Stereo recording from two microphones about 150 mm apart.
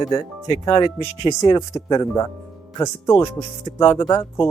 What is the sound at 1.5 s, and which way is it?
Speech, 25° left (ahead or behind).